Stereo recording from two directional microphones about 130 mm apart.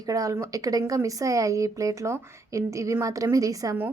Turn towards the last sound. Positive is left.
turn(degrees=-25)  # may be behind; listen again after turning